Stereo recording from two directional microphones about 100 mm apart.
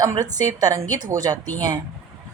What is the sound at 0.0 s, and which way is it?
Speech, 35° right (ahead or behind).